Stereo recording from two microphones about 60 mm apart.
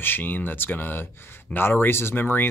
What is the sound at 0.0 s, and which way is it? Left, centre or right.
A man's voice, left.